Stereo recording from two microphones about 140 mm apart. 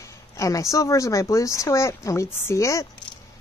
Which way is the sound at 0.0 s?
20° left (ahead or behind).